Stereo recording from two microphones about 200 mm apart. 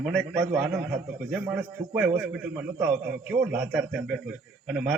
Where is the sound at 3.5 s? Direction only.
5° right (ahead or behind).